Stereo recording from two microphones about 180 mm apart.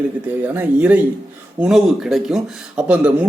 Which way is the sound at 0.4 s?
10° right (ahead or behind).